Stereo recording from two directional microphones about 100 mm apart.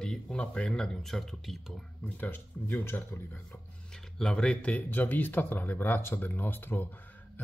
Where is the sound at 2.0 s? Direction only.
15° left (ahead or behind).